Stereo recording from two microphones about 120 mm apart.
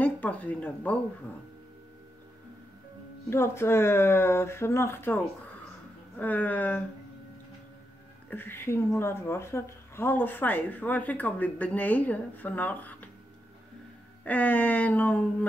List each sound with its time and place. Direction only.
0.0 s speech: 10° left (ahead or behind)
3.3 s speech: 20° left (ahead or behind)
8.3 s speech: 15° left (ahead or behind)
14.2 s speech: 15° left (ahead or behind)